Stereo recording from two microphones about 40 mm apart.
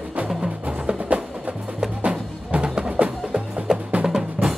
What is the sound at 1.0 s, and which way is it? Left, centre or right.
Music, right.